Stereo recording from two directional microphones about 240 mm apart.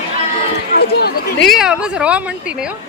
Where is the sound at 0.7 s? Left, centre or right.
Left.